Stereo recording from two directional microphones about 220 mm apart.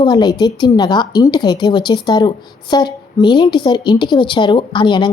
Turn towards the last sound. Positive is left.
turn(degrees=20)  # may be behind; listen again after turning